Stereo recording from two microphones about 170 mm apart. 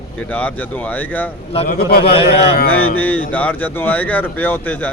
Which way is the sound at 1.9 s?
65° left (ahead or behind).